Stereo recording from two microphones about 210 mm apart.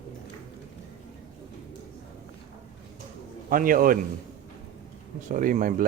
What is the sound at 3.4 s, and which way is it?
Speech, 40° right (ahead or behind).